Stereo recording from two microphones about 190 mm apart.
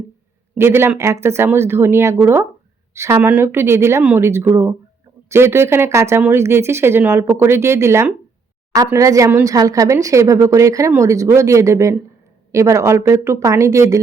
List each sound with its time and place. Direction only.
0.5 s speech: 10° right (ahead or behind)